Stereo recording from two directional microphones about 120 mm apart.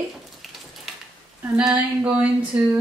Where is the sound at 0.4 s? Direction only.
Centre (ahead or behind).